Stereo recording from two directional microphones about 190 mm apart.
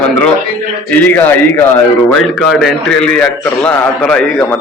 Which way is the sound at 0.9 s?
10° left (ahead or behind).